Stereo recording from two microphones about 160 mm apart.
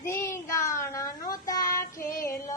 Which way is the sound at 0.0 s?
15° left (ahead or behind).